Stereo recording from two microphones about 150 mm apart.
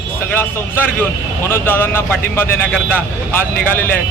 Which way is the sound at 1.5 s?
15° left (ahead or behind).